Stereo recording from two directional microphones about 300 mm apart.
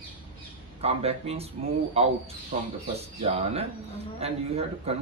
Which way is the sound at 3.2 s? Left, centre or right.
Centre.